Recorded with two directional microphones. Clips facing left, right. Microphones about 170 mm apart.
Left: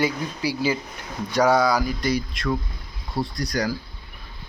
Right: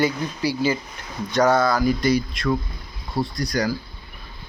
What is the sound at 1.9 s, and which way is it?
Speech, 60° right (ahead or behind).